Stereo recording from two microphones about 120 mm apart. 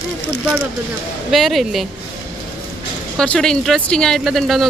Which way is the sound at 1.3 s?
Centre (ahead or behind).